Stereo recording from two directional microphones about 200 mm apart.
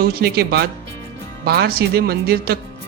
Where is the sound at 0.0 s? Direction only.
50° right (ahead or behind).